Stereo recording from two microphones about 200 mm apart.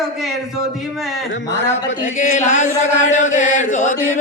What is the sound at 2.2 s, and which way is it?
Chant, 40° left (ahead or behind).